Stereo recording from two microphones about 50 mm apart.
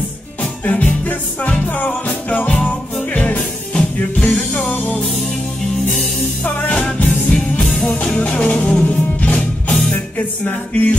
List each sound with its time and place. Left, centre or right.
0.7 s music: left
6.4 s music: left